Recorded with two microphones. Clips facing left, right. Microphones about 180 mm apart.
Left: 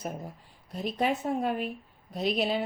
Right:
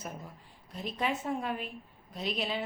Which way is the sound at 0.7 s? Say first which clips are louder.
Left 5 dB; 35° left (ahead or behind).